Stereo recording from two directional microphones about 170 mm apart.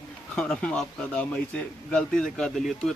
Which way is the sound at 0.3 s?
5° left (ahead or behind).